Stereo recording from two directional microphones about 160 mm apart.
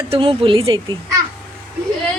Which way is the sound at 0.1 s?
35° right (ahead or behind).